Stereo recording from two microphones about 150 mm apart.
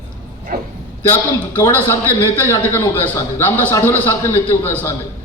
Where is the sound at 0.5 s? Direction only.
90° right.